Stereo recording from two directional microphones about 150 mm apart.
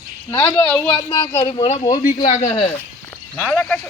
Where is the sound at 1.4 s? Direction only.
35° left (ahead or behind).